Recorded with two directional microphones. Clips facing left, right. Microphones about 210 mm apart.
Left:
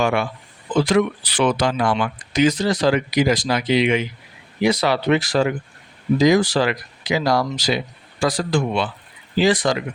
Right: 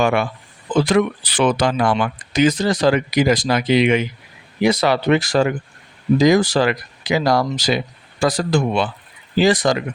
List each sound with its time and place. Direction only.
0.0 s speech: 55° right (ahead or behind)